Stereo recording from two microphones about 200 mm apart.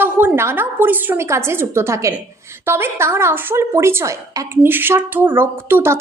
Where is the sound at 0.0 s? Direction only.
10° right (ahead or behind).